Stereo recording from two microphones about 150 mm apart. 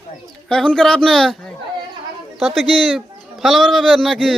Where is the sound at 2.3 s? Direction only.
Centre (ahead or behind).